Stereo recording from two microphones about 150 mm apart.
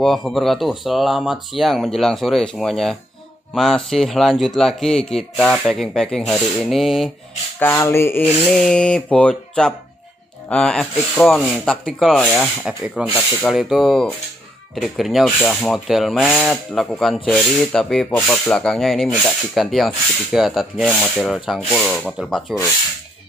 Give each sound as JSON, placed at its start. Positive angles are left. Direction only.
{"t": 0.0, "sound": "speech", "side_deg": 0}
{"t": 7.5, "sound": "a sound", "side_deg": 15}
{"t": 8.5, "sound": "speech", "side_deg": 5}
{"t": 12.8, "sound": "speech", "side_deg": -10}